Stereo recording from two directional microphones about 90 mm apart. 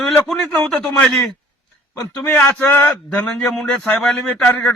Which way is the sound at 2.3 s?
20° left (ahead or behind).